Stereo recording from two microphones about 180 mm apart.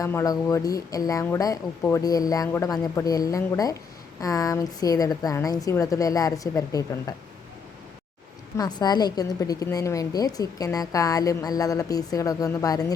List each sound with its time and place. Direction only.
0.0 s a woman's voice: 15° left (ahead or behind)
8.5 s a woman's voice: 20° left (ahead or behind)